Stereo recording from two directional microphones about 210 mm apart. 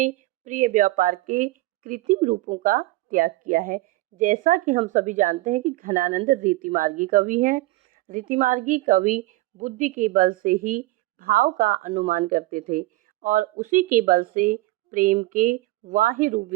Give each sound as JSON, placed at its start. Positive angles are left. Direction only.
{"t": 0.0, "sound": "a woman's voice", "side_deg": -40}